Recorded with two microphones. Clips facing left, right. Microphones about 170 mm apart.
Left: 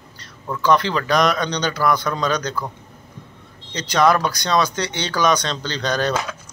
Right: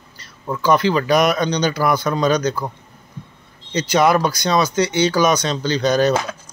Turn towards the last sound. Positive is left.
turn(degrees=-10)  # may be behind; listen again after turning